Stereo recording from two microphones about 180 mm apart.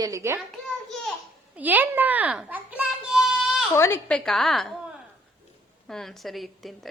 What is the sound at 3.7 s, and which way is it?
A woman's voice, 10° left (ahead or behind).